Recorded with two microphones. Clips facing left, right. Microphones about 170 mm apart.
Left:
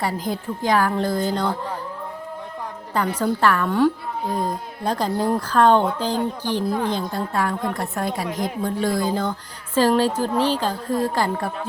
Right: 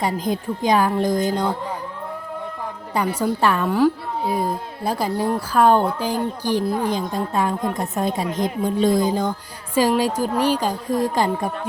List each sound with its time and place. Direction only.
0.0 s speech: 20° right (ahead or behind)
2.9 s speech: 10° right (ahead or behind)
3.7 s a woman's voice: 5° right (ahead or behind)